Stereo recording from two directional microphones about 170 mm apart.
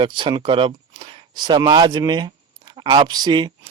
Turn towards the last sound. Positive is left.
turn(degrees=-25)  # may be behind; listen again after turning